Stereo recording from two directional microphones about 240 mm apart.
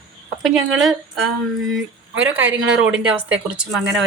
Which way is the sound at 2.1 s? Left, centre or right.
Right.